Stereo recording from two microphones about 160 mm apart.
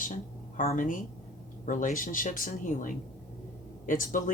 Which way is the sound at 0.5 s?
50° left (ahead or behind).